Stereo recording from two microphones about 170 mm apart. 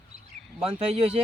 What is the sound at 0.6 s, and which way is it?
Speech, 35° right (ahead or behind).